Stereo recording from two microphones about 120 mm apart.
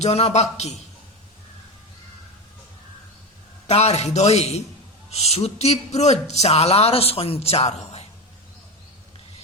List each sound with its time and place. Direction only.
0.0 s speech: 60° left (ahead or behind)
3.7 s speech: 65° left (ahead or behind)